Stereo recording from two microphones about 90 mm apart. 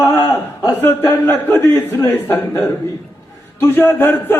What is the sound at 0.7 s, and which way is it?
A man's voice, 25° left (ahead or behind).